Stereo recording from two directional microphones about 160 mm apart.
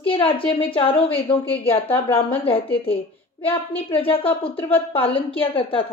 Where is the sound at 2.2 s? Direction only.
35° left (ahead or behind).